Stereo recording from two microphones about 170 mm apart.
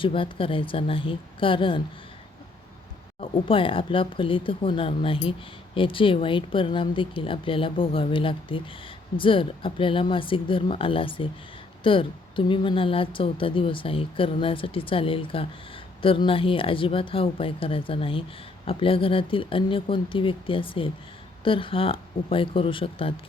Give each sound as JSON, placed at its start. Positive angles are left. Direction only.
{"t": 0.0, "sound": "speech", "side_deg": 30}
{"t": 3.2, "sound": "speech", "side_deg": 30}